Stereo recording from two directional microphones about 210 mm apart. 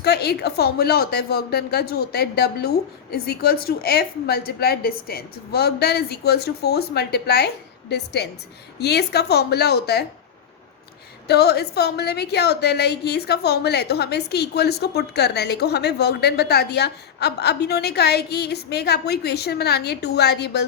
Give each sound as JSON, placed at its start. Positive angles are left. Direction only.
{"t": 0.0, "sound": "a woman's voice", "side_deg": 50}
{"t": 11.3, "sound": "a woman's voice", "side_deg": 50}